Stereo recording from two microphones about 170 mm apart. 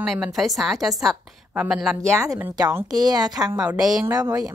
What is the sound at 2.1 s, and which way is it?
Speech, 15° right (ahead or behind).